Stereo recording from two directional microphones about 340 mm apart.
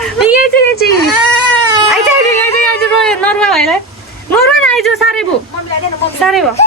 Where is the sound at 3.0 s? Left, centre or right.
Centre.